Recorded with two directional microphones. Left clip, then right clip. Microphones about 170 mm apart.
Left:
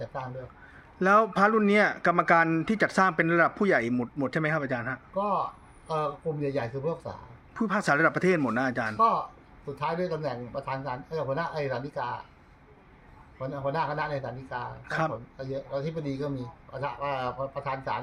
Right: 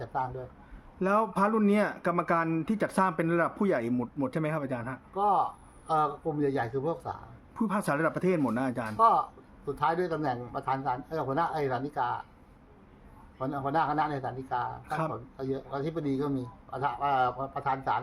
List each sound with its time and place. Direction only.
0.9 s speech: centre (ahead or behind)
5.1 s speech: 20° right (ahead or behind)
9.8 s speech: 20° right (ahead or behind)
13.7 s speech: 20° right (ahead or behind)